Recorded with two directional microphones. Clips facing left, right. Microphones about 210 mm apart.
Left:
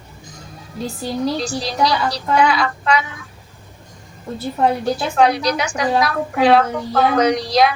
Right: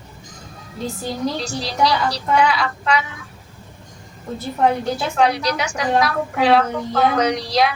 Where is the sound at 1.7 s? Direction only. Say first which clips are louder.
Right 1 dB; 45° left (ahead or behind).